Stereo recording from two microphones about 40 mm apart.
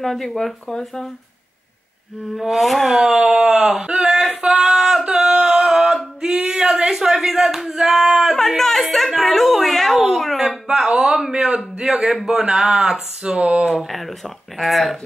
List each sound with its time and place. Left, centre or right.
0.0 s speech: centre
0.7 s speech: centre
2.3 s speech: centre
2.9 s speech: centre
3.4 s a sound: right
3.9 s speech: centre
4.4 s a sound: centre
8.4 s speech: centre
10.9 s a sound: centre
11.2 s speech: centre
13.2 s a sound: right
13.7 s speech: centre